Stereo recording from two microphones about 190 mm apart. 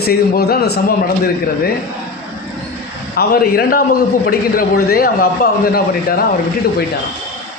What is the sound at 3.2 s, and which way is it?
A man's voice, 50° left (ahead or behind).